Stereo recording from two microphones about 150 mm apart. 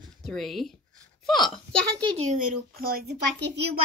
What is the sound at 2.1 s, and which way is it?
Speech, 55° right (ahead or behind).